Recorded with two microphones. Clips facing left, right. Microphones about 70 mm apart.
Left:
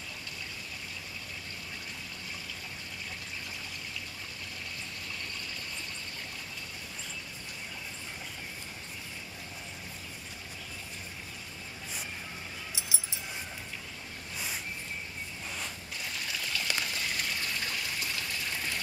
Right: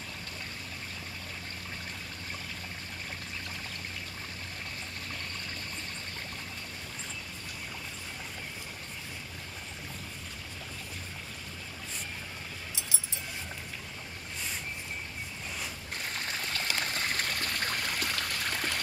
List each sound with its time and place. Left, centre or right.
15.9 s stream: right